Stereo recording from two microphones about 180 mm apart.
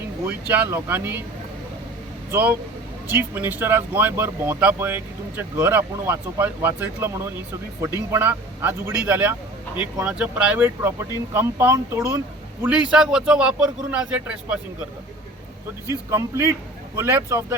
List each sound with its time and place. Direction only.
0.3 s speech: 10° right (ahead or behind)
2.3 s speech: 10° right (ahead or behind)
8.1 s speech: 10° right (ahead or behind)
15.9 s speech: 15° right (ahead or behind)